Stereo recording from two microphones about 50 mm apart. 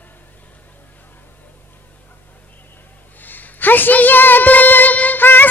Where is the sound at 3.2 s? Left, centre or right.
Left.